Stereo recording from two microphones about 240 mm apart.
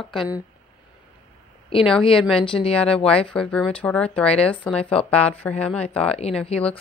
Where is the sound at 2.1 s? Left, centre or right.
Centre.